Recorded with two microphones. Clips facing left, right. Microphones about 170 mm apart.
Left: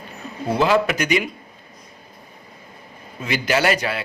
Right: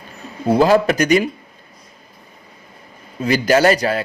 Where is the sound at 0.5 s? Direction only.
40° right (ahead or behind).